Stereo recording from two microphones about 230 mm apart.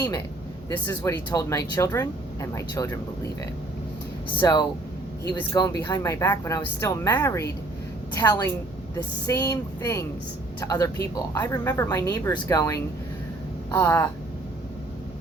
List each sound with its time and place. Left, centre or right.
0.7 s speech: centre
4.4 s speech: centre